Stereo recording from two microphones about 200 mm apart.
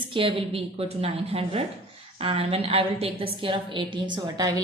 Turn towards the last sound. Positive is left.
turn(degrees=-20)  # may be behind; listen again after turning